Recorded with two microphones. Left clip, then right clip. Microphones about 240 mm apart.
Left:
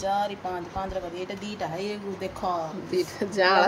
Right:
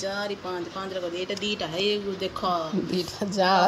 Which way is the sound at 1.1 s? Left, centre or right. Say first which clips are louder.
Right 5 dB; centre.